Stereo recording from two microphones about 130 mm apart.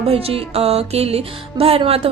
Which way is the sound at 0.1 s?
50° right (ahead or behind).